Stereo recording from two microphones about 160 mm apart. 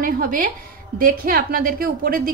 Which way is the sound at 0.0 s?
60° right (ahead or behind).